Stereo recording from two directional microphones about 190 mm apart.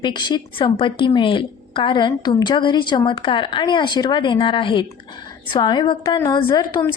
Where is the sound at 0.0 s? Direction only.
25° left (ahead or behind).